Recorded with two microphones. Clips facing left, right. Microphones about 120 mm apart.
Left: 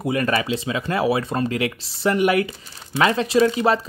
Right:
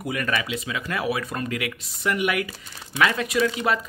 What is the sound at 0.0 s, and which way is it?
Speech, 30° left (ahead or behind).